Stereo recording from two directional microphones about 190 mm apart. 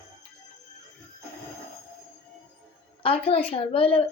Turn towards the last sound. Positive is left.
turn(degrees=30)  # may be behind; listen again after turning